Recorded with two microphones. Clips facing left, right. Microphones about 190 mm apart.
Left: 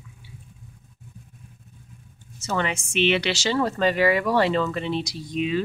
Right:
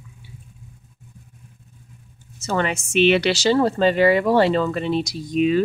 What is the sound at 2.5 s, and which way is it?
Speech, 45° right (ahead or behind).